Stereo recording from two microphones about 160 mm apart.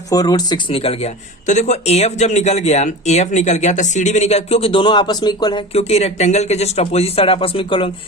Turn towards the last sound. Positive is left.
turn(degrees=35)  # may be behind; listen again after turning